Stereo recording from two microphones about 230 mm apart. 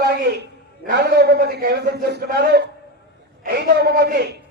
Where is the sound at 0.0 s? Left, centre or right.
Right.